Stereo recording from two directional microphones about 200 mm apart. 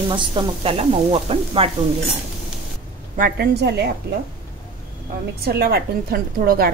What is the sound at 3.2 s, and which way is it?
Speech, 55° right (ahead or behind).